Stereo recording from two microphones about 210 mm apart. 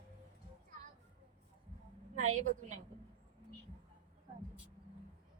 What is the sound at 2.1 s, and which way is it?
Speech, 35° right (ahead or behind).